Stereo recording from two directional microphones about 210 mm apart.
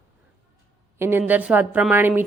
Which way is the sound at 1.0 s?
10° right (ahead or behind).